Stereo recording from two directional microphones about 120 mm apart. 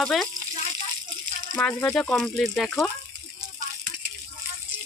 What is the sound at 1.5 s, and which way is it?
Speech, 10° left (ahead or behind).